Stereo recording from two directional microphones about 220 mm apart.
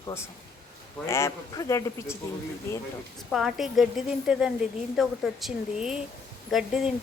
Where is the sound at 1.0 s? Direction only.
10° left (ahead or behind).